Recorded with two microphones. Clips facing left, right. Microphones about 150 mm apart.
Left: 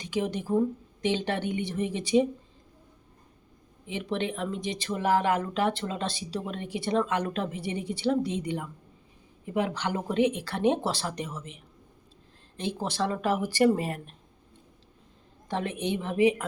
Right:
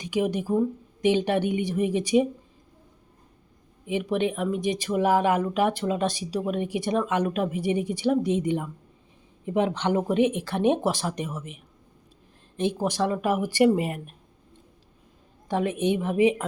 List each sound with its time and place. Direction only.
0.0 s speech: 15° right (ahead or behind)
3.8 s speech: 15° right (ahead or behind)
15.4 s a woman's voice: 15° right (ahead or behind)